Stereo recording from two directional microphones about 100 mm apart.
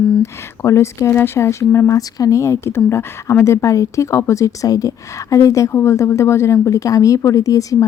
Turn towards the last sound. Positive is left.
turn(degrees=35)  # may be behind; listen again after turning